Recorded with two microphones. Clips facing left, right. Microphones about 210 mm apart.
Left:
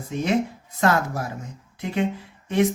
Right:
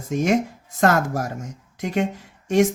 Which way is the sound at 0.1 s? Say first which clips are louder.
Right 3 dB; 45° right (ahead or behind).